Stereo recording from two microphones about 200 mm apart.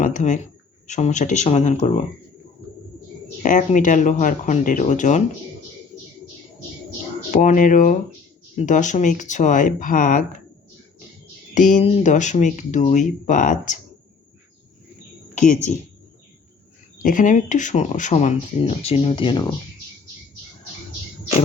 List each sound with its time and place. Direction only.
0.0 s a sound: 40° left (ahead or behind)
0.9 s speech: 35° left (ahead or behind)
3.4 s speech: 40° left (ahead or behind)
7.3 s speech: 40° left (ahead or behind)
11.5 s speech: 40° left (ahead or behind)
15.4 s speech: 40° left (ahead or behind)
17.0 s speech: 45° left (ahead or behind); by 19.5 s 25° left (ahead or behind)